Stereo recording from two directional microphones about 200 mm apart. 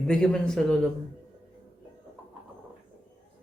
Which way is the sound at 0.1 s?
5° left (ahead or behind).